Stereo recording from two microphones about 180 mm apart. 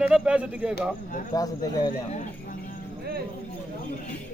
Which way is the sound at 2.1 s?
45° left (ahead or behind).